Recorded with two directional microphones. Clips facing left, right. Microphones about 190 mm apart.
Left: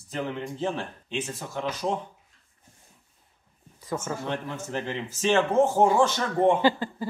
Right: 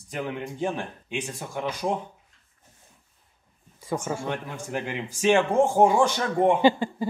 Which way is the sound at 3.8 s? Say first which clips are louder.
Right 2 dB; 10° right (ahead or behind).